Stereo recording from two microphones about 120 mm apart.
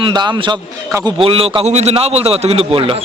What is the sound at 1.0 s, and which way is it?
A man's voice, 50° right (ahead or behind).